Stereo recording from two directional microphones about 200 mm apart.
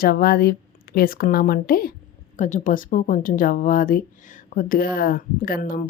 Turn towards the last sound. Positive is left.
turn(degrees=45)  # may be behind; listen again after turning